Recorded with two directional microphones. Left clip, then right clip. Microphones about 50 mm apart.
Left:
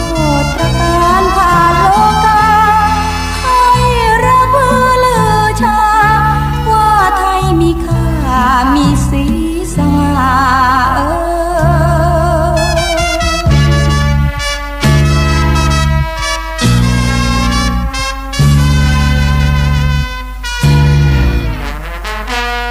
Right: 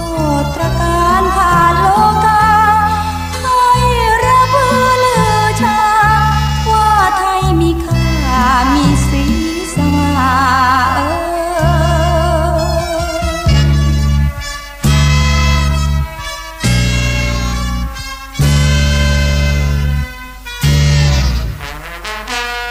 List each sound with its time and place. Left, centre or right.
0.2 s music: left
11.5 s music: left